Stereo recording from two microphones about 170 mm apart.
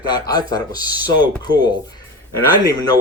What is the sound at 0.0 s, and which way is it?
Speech, 25° left (ahead or behind).